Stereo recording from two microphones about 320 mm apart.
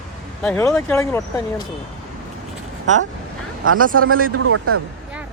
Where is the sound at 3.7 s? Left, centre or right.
Right.